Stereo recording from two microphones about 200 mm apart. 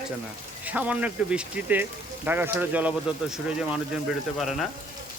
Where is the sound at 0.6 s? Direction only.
5° right (ahead or behind).